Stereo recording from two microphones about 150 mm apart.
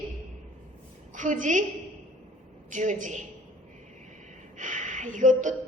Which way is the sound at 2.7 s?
55° right (ahead or behind).